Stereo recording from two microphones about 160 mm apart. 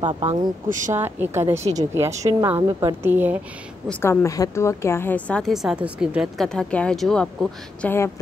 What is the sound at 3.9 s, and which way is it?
A woman's voice, 15° left (ahead or behind).